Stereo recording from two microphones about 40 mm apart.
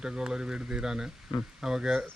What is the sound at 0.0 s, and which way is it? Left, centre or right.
Speech, centre.